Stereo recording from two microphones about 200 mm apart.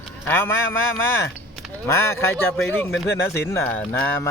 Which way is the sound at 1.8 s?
10° left (ahead or behind).